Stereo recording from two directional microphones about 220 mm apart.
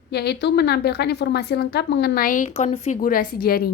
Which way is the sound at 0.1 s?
50° left (ahead or behind).